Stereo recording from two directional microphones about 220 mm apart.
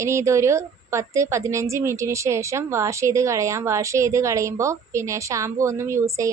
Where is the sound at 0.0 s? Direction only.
15° right (ahead or behind).